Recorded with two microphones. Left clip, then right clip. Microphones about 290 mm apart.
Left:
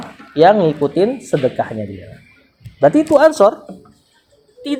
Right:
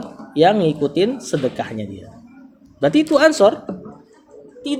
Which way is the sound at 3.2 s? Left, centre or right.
Left.